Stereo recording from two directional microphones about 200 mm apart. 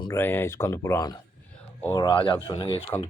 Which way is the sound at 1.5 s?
5° left (ahead or behind).